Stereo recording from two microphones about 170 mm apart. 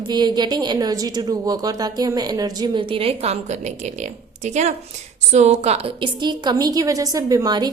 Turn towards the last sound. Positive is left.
turn(degrees=-25)  # may be behind; listen again after turning